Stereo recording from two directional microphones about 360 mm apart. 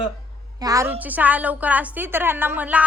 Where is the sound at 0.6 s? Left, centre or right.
Centre.